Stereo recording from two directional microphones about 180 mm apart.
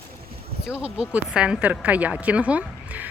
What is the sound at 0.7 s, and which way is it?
Speech, 5° right (ahead or behind).